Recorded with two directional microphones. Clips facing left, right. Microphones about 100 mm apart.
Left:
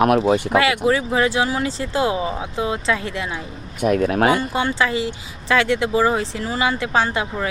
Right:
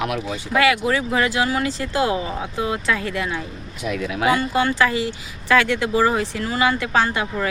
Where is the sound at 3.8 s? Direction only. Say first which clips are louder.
Left 6 dB; 45° left (ahead or behind).